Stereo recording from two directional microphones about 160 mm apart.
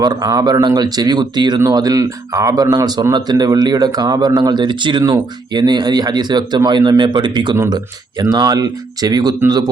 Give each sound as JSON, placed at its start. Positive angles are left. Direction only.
{"t": 0.0, "sound": "speech", "side_deg": -25}
{"t": 7.5, "sound": "speech", "side_deg": -15}